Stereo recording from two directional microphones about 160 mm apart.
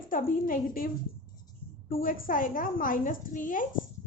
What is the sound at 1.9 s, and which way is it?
A woman's voice, 60° left (ahead or behind).